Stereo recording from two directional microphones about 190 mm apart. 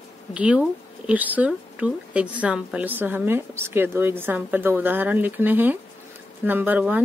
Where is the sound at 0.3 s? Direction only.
5° right (ahead or behind).